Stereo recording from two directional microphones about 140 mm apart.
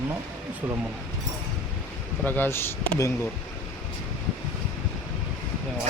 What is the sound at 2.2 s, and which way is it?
Speech, 15° left (ahead or behind).